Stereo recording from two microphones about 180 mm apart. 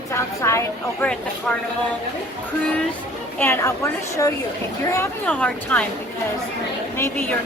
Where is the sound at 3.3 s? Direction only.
10° left (ahead or behind).